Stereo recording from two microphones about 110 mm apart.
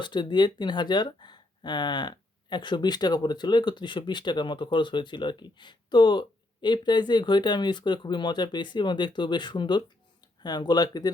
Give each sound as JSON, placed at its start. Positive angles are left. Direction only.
{"t": 0.0, "sound": "speech", "side_deg": 45}